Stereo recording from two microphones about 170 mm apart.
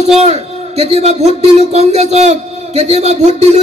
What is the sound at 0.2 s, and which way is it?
Speech, 40° right (ahead or behind).